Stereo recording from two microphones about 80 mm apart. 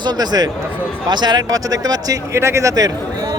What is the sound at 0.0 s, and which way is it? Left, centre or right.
Speech, right.